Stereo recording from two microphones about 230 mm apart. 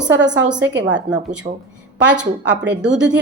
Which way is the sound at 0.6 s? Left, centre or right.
Right.